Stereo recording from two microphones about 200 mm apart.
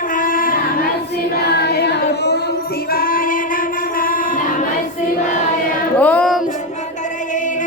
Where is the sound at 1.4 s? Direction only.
55° left (ahead or behind).